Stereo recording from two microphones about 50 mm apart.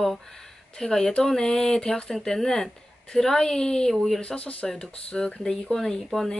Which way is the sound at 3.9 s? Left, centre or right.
Centre.